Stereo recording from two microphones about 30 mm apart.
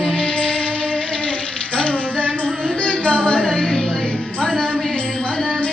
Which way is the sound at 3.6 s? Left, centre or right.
Left.